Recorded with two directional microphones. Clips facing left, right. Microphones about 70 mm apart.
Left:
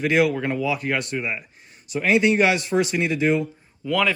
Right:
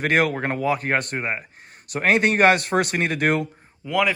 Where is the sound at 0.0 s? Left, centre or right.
Right.